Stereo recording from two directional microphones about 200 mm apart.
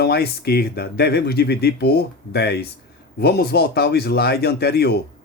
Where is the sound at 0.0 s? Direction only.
55° left (ahead or behind).